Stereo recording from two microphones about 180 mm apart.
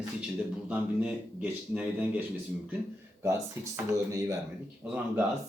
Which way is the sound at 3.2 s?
15° right (ahead or behind).